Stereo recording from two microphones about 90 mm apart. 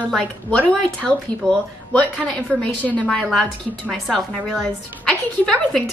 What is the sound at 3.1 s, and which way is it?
A woman's voice, 5° left (ahead or behind).